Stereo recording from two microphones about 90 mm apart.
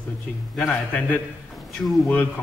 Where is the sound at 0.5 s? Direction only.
10° left (ahead or behind).